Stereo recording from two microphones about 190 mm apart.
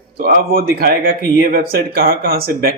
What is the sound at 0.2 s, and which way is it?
Speech, 50° right (ahead or behind).